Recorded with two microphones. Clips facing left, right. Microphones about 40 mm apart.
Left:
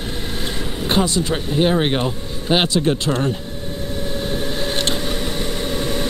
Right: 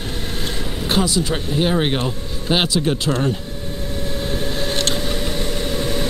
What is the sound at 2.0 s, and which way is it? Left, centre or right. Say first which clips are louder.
Speech: left 1 dB; centre.